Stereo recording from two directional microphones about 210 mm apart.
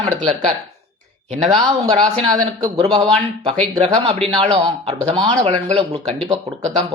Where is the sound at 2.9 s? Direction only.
20° right (ahead or behind).